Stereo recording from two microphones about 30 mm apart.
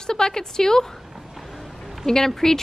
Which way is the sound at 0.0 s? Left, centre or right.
Left.